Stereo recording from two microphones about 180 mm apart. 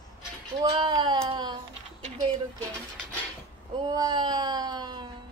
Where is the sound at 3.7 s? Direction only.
25° right (ahead or behind).